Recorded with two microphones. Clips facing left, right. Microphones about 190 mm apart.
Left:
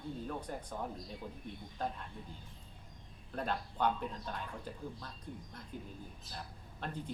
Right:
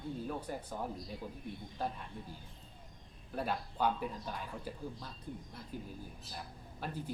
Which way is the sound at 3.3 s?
10° right (ahead or behind).